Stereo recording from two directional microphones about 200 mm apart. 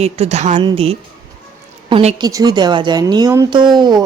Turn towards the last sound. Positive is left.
turn(degrees=-20)  # may be behind; listen again after turning